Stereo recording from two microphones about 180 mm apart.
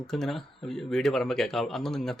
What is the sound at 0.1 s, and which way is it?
Speech, centre (ahead or behind).